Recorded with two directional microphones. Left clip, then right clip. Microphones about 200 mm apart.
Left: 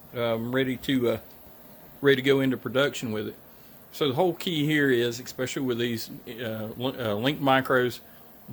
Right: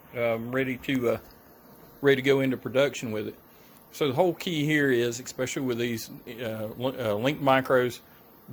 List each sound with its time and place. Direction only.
0.1 s speech: 10° left (ahead or behind)